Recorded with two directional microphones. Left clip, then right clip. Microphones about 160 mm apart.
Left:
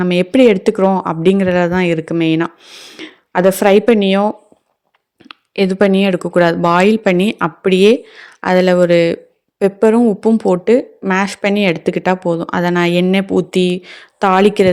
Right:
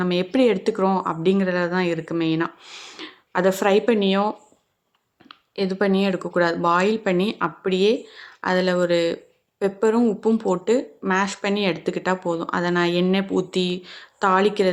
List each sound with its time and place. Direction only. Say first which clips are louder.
0.0 s speech: left 9 dB; 40° left (ahead or behind)
2.6 s speech: left 4 dB; 25° left (ahead or behind)
3.0 s speech: left 8 dB; 40° left (ahead or behind)